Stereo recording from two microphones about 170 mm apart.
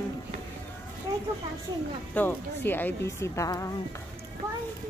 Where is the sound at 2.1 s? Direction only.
10° left (ahead or behind).